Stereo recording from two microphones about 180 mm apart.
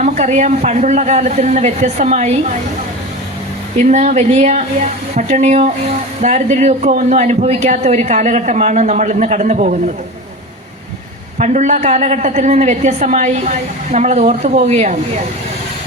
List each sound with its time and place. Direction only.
0.0 s a man's voice: 40° right (ahead or behind)
3.8 s a man's voice: 40° right (ahead or behind)
11.3 s a man's voice: 40° right (ahead or behind)